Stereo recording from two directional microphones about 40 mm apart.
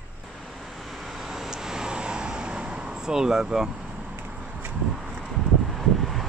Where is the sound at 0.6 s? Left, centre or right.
Centre; by 3.0 s right.